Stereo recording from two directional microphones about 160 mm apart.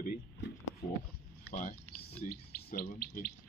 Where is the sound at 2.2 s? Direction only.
65° left (ahead or behind).